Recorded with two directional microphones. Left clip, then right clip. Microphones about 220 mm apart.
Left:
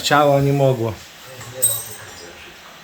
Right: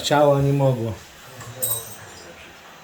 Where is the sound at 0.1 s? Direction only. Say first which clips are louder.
Left 2 dB; 30° left (ahead or behind).